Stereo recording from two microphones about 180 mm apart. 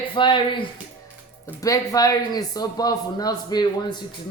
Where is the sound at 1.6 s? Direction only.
20° left (ahead or behind).